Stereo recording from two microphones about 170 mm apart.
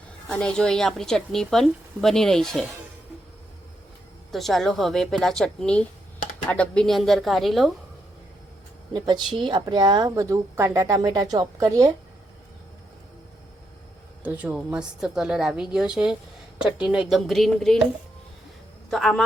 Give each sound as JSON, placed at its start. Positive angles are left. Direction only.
{"t": 0.3, "sound": "speech", "side_deg": 5}
{"t": 4.3, "sound": "speech", "side_deg": 0}
{"t": 8.9, "sound": "a woman's voice", "side_deg": -25}
{"t": 14.3, "sound": "speech", "side_deg": -10}
{"t": 18.9, "sound": "speech", "side_deg": 0}